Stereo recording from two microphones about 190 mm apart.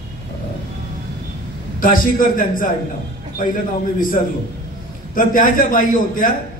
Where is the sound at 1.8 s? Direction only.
45° left (ahead or behind).